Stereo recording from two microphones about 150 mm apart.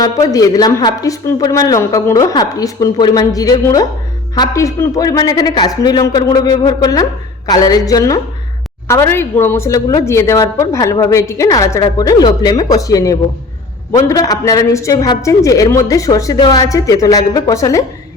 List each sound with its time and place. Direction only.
0.0 s a man's voice: 25° left (ahead or behind)